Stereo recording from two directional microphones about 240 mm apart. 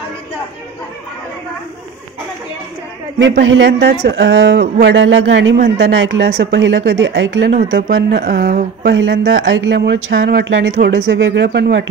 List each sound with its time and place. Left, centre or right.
3.2 s speech: right
7.5 s speech: right